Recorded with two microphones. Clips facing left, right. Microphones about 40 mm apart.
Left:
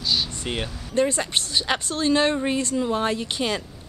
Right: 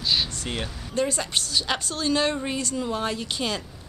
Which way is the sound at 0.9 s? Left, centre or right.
Left.